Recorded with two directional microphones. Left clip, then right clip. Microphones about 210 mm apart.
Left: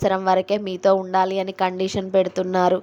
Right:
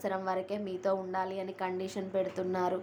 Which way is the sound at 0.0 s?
40° left (ahead or behind).